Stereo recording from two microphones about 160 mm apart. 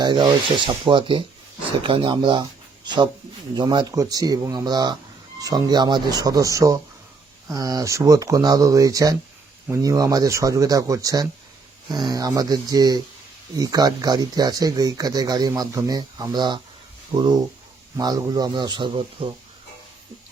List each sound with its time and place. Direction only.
0.0 s speech: 30° right (ahead or behind)